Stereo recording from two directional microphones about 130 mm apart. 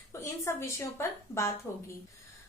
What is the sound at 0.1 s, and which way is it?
A woman's voice, 20° left (ahead or behind).